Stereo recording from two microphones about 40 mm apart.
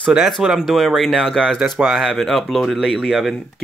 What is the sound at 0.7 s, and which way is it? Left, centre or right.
Speech, centre.